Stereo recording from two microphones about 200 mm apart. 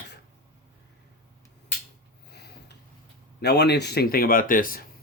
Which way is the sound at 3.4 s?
55° left (ahead or behind).